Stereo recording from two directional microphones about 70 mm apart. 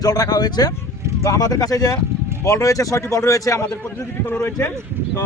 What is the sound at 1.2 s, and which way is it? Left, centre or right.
Speech, left.